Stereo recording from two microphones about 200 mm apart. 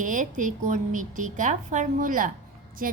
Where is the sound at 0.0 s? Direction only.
40° right (ahead or behind).